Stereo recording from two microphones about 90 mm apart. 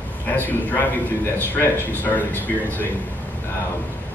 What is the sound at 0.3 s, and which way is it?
Speech, 20° left (ahead or behind).